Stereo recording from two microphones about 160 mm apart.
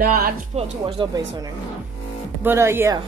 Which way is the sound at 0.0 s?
65° right (ahead or behind).